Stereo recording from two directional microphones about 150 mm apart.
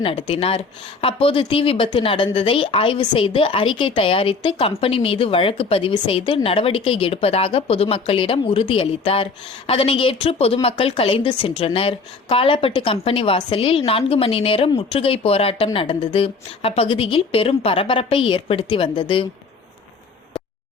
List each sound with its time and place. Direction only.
0.0 s a woman's voice: 40° left (ahead or behind)